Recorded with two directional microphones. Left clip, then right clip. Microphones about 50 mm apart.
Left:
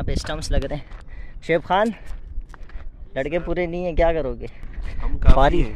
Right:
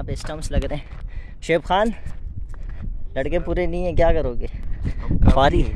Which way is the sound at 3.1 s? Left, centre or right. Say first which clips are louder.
Right 1 dB; right.